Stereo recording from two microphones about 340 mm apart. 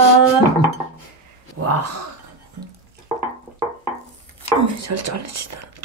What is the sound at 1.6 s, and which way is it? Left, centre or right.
Speech, right.